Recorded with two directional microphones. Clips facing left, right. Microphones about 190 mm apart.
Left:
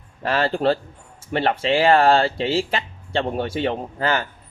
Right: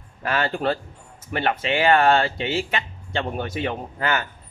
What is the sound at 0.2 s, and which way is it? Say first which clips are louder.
A man's voice: left 3 dB; 35° left (ahead or behind).